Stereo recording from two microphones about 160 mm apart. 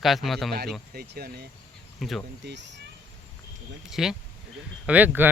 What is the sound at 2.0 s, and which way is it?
Speech, centre (ahead or behind).